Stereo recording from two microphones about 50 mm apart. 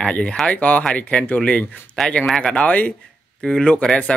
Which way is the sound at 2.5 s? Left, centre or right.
Left.